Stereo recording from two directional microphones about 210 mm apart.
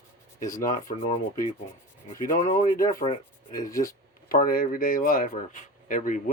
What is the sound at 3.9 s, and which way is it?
Speech, 40° left (ahead or behind).